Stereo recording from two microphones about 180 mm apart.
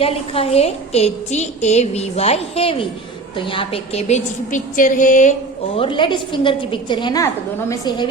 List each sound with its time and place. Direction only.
0.0 s a woman's voice: 35° left (ahead or behind)
5.7 s a woman's voice: 30° left (ahead or behind)